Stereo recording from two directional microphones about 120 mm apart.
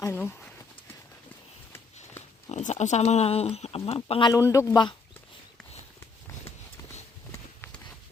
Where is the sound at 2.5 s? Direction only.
65° left (ahead or behind).